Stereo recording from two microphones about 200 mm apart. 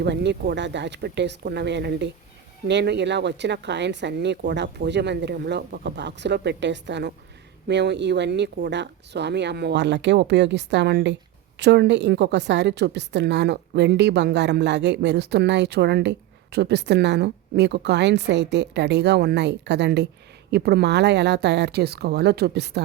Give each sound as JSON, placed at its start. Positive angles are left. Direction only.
{"t": 0.0, "sound": "a woman's voice", "side_deg": -60}